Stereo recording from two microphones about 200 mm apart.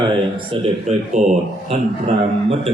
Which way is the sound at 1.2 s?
40° right (ahead or behind).